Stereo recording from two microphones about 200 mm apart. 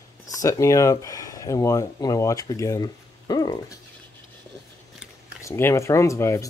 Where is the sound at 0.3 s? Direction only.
15° left (ahead or behind).